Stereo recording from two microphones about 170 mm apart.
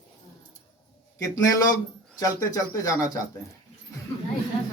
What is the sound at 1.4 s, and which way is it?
Speech, 20° left (ahead or behind).